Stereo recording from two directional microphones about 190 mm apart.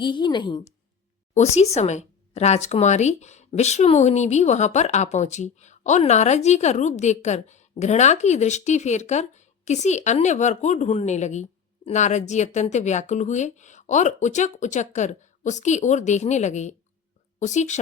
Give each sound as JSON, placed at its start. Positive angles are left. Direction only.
{"t": 0.0, "sound": "a woman's voice", "side_deg": 25}
{"t": 1.3, "sound": "speech", "side_deg": 35}